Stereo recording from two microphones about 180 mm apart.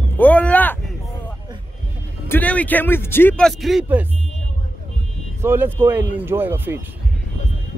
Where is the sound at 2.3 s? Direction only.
10° left (ahead or behind).